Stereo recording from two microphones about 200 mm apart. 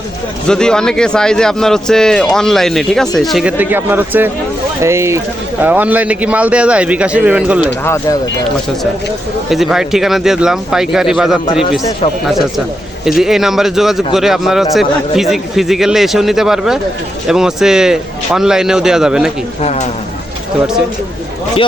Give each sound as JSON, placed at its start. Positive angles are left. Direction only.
{"t": 0.4, "sound": "a man's voice", "side_deg": 5}
{"t": 9.5, "sound": "speech", "side_deg": 0}
{"t": 19.6, "sound": "speech", "side_deg": 35}